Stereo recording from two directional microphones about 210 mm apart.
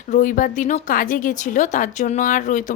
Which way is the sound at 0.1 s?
40° left (ahead or behind).